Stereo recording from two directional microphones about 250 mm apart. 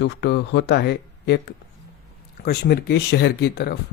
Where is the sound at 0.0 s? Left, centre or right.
Left.